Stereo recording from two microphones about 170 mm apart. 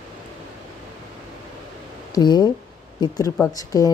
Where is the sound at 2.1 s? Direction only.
25° left (ahead or behind).